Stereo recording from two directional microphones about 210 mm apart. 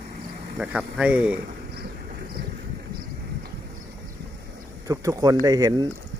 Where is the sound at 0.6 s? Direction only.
5° right (ahead or behind).